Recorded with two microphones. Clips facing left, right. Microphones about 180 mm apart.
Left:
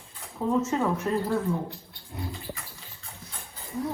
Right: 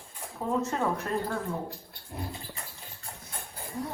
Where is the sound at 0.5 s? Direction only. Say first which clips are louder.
Left 3 dB; 5° left (ahead or behind).